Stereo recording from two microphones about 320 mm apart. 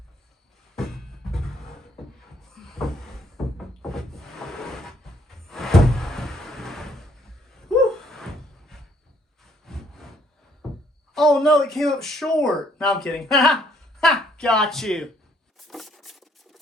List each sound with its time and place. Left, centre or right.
0.8 s music: centre
2.4 s cupboard open or close: centre
3.8 s a sound: centre
9.4 s wood: centre
10.6 s a sound: centre
11.1 s speech: centre
15.5 s engine: centre